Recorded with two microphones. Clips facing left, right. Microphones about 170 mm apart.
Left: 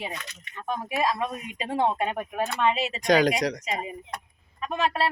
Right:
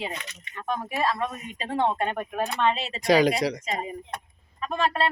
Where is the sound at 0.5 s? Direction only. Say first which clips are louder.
Right 1 dB; centre (ahead or behind).